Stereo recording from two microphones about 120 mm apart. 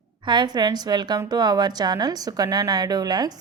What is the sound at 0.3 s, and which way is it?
A woman's voice, 35° right (ahead or behind).